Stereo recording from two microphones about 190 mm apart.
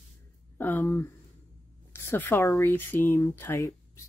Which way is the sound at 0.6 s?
10° left (ahead or behind).